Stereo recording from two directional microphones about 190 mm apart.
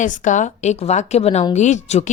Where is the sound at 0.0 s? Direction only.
40° left (ahead or behind).